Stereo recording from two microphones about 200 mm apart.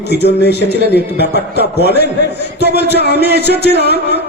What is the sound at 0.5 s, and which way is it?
Speech, 55° right (ahead or behind).